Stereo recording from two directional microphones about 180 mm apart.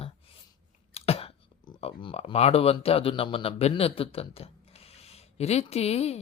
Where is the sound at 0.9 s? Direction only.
35° left (ahead or behind).